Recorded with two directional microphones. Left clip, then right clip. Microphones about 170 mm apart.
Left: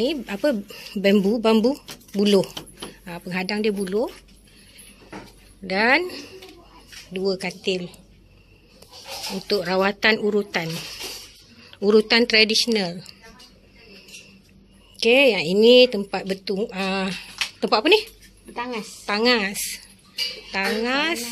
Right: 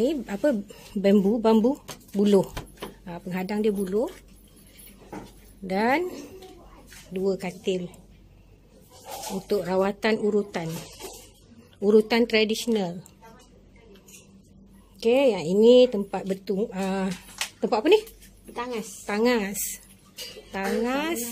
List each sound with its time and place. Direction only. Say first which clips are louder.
0.3 s speech: left 2 dB; 10° right (ahead or behind)
5.7 s speech: left 5 dB; 10° right (ahead or behind)
9.5 s speech: left 3 dB; 5° right (ahead or behind)
11.8 s speech: left 3 dB; 5° right (ahead or behind)
15.0 s speech: left 5 dB; 5° right (ahead or behind)
18.5 s a woman's voice: left 2 dB; 40° left (ahead or behind)
19.0 s speech: left 4 dB; 10° right (ahead or behind)
20.5 s speech: left 4 dB; 10° right (ahead or behind)